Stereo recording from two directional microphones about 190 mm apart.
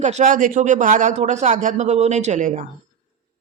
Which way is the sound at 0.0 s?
40° right (ahead or behind).